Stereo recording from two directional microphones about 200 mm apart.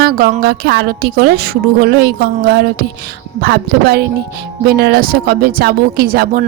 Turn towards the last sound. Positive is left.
turn(degrees=-50)  # may be behind; listen again after turning